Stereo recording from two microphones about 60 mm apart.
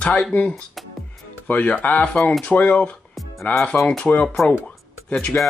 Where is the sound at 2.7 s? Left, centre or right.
Centre.